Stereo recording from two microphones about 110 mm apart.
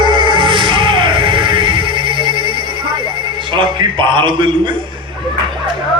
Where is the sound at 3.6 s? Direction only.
50° right (ahead or behind).